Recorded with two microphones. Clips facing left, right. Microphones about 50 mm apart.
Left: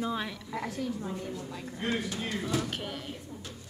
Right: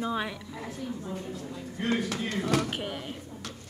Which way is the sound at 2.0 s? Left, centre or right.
Right.